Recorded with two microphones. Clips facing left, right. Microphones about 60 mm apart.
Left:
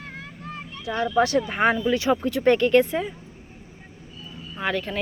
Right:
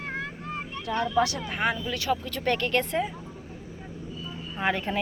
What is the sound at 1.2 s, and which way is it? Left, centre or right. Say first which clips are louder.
Speech: left 8 dB; left.